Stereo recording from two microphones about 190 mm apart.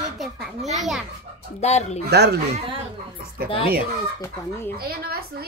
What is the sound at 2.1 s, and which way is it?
Speech, 60° right (ahead or behind).